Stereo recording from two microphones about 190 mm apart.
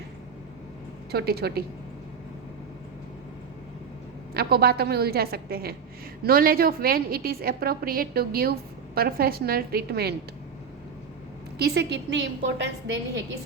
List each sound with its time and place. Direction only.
1.1 s a woman's voice: 55° right (ahead or behind)
4.4 s a woman's voice: 55° right (ahead or behind)
11.5 s a woman's voice: 60° right (ahead or behind)